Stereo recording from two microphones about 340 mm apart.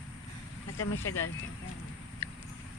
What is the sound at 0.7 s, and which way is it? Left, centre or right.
Speech, left.